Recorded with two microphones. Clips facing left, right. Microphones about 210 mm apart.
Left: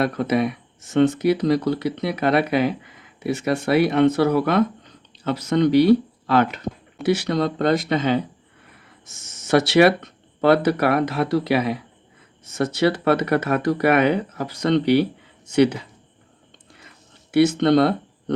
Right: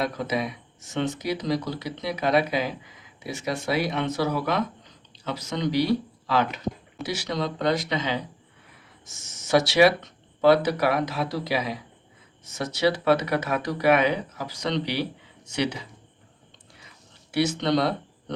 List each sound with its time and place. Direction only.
0.0 s speech: 60° left (ahead or behind)
17.3 s speech: 55° left (ahead or behind)